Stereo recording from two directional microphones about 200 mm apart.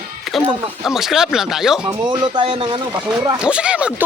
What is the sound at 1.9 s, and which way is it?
Speech, 20° right (ahead or behind).